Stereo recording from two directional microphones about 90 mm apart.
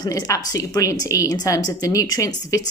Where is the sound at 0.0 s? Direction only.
45° left (ahead or behind).